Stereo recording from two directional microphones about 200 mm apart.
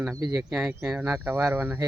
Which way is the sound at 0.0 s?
15° right (ahead or behind).